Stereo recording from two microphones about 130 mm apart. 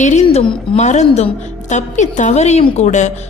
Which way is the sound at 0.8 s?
60° left (ahead or behind).